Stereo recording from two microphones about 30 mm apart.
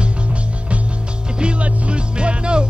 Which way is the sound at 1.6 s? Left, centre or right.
Right.